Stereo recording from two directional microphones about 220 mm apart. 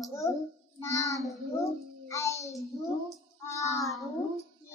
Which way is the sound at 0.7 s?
15° left (ahead or behind).